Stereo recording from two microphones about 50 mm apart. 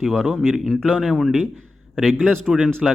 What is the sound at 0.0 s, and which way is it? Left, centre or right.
Speech, centre.